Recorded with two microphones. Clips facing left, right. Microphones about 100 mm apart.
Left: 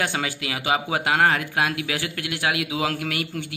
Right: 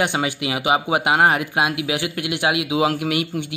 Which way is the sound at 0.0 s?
20° right (ahead or behind).